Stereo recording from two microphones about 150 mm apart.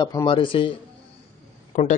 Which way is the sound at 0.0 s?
30° left (ahead or behind).